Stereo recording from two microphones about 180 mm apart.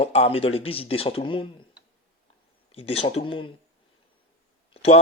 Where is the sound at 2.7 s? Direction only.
30° left (ahead or behind).